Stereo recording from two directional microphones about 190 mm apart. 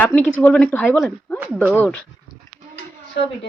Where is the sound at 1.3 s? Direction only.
10° right (ahead or behind).